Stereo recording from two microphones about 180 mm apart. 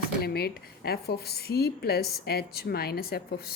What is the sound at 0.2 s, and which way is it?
A woman's voice, 60° left (ahead or behind).